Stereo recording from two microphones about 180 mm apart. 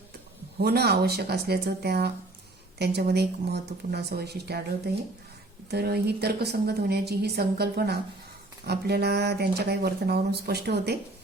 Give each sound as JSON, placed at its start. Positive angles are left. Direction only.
{"t": 0.6, "sound": "speech", "side_deg": -60}
{"t": 5.7, "sound": "speech", "side_deg": -60}